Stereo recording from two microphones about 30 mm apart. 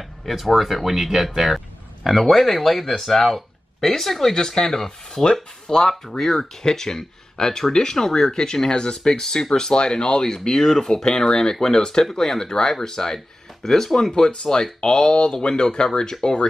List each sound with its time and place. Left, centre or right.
0.2 s speech: centre
2.0 s speech: centre
5.2 s speech: left
6.0 s speech: centre
6.3 s speech: centre
8.6 s speech: left; by 14.1 s centre
14.1 s speech: left